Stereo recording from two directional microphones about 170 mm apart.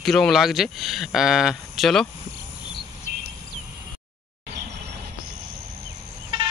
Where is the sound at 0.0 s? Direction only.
Centre (ahead or behind).